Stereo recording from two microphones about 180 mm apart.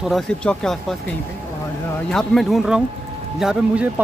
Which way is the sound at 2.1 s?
Centre (ahead or behind).